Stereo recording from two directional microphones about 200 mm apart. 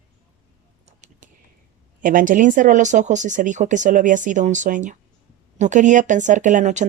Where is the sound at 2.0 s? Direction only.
40° right (ahead or behind).